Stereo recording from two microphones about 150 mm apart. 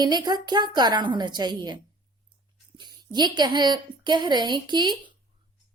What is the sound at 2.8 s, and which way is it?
A woman's voice, 30° right (ahead or behind).